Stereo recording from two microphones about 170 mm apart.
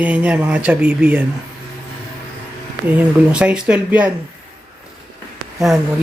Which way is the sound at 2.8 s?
5° right (ahead or behind).